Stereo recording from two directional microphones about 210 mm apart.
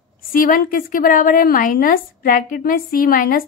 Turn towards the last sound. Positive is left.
turn(degrees=40)  # may be behind; listen again after turning